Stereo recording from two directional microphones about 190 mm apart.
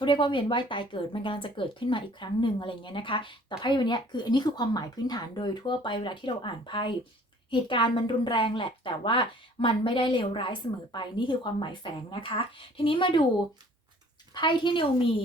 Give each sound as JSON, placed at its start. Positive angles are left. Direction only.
{"t": 0.0, "sound": "a woman's voice", "side_deg": 25}
{"t": 14.3, "sound": "a woman's voice", "side_deg": 25}